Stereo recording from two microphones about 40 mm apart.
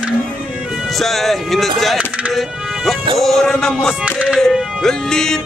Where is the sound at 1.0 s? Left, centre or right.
Centre.